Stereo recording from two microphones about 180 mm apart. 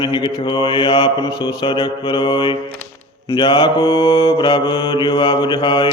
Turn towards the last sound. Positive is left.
turn(degrees=25)  # may be behind; listen again after turning